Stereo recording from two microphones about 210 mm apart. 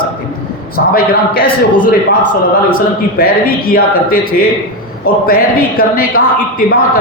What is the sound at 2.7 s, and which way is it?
A man's voice, 45° left (ahead or behind).